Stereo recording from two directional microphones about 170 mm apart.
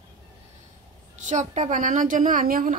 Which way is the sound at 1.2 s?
45° right (ahead or behind).